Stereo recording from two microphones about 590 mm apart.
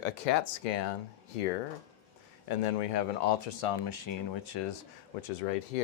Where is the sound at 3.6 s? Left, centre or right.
Left.